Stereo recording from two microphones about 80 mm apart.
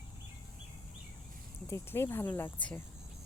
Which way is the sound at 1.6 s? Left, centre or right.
Left.